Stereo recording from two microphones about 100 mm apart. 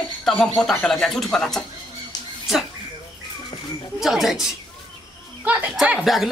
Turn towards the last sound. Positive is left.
turn(degrees=0)  # may be behind; listen again after turning